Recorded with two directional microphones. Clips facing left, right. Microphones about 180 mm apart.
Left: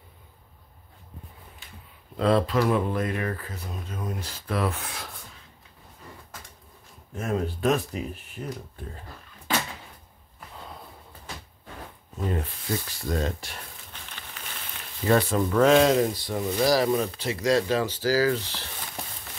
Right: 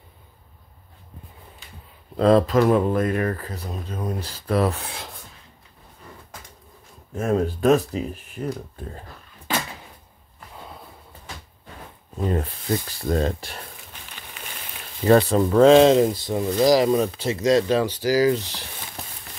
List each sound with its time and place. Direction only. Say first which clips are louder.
2.1 s speech: right 6 dB; 45° right (ahead or behind)
7.2 s speech: right 6 dB; 35° right (ahead or behind)
8.4 s speech: right 7 dB; 65° right (ahead or behind)
12.3 s speech: right 5 dB; 40° right (ahead or behind)
13.9 s a sound: right 1 dB; 10° right (ahead or behind)
15.0 s speech: right 6 dB; 35° right (ahead or behind); by 18.7 s 15° right (ahead or behind)